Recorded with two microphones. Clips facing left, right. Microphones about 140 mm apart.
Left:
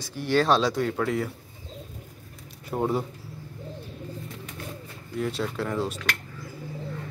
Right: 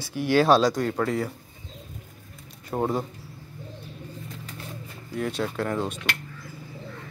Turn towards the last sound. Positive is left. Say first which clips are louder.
# right 1 dB
turn(degrees=0)  # may be behind; listen again after turning